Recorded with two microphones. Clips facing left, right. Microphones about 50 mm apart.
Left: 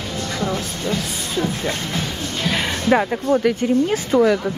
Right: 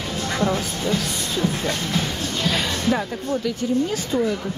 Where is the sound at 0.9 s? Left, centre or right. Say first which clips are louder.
Even; centre.